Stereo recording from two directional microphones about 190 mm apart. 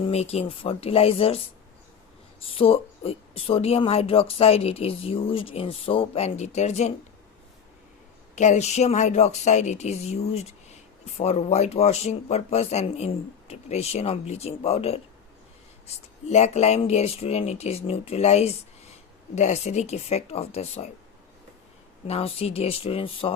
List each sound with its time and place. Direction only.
0.1 s a woman's voice: 35° left (ahead or behind)
2.4 s a woman's voice: 30° left (ahead or behind)
8.4 s a woman's voice: 35° left (ahead or behind)
22.0 s a woman's voice: 30° left (ahead or behind)